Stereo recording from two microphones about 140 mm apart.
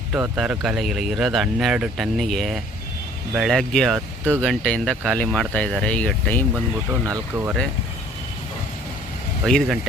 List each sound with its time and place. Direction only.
0.1 s speech: 5° right (ahead or behind); by 6.4 s 10° left (ahead or behind)
7.0 s speech: 20° right (ahead or behind)
9.4 s speech: centre (ahead or behind)